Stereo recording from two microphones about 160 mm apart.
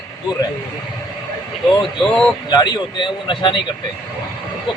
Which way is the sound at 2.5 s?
25° left (ahead or behind).